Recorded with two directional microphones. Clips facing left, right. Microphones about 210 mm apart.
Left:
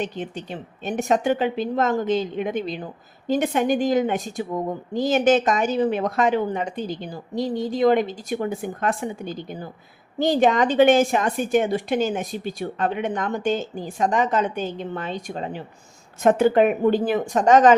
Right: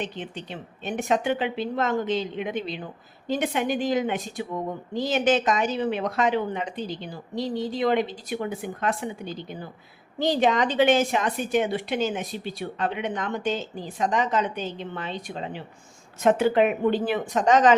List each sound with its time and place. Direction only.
0.0 s a woman's voice: 45° left (ahead or behind)